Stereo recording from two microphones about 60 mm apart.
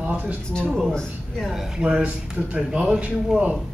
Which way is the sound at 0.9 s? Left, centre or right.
Centre.